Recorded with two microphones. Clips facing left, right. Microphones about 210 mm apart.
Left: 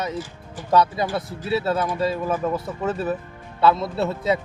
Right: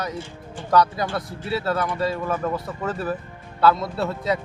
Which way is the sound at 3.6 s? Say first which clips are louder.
Even; 25° left (ahead or behind).